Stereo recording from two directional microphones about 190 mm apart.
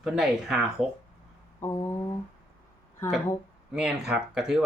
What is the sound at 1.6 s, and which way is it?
Speech, 15° left (ahead or behind).